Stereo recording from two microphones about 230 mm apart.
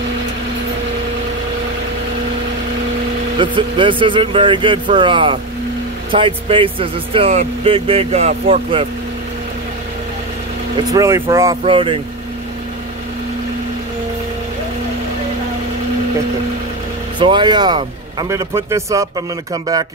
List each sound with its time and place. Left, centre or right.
3.3 s speech: right
10.9 s speech: centre
17.2 s speech: right